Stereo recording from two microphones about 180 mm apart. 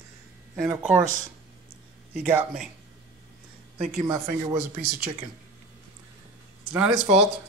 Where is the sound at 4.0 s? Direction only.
20° right (ahead or behind).